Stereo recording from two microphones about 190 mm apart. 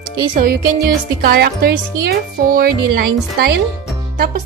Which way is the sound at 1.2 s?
55° right (ahead or behind).